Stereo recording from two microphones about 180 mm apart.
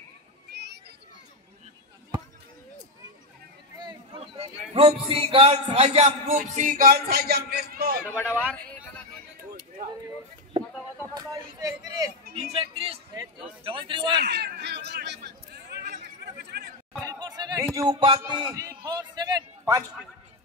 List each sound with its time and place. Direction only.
0.5 s a sound: 65° right (ahead or behind)
3.7 s a man's voice: 25° right (ahead or behind); by 8.0 s 55° right (ahead or behind)
11.1 s speech: 20° right (ahead or behind)
12.5 s a man's voice: 30° right (ahead or behind)
14.1 s speech: 65° right (ahead or behind)
16.3 s chatter: 65° right (ahead or behind)
17.0 s chatter: 20° right (ahead or behind)
17.7 s speech: 25° right (ahead or behind)
18.9 s a sound: 25° right (ahead or behind)